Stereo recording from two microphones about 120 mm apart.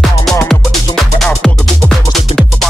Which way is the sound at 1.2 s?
Centre (ahead or behind).